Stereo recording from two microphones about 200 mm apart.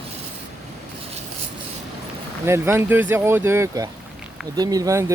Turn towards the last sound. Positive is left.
turn(degrees=-15)  # may be behind; listen again after turning